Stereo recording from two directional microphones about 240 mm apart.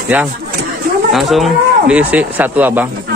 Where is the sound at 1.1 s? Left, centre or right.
Centre.